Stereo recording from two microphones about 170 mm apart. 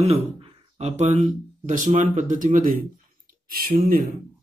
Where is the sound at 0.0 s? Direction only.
40° right (ahead or behind).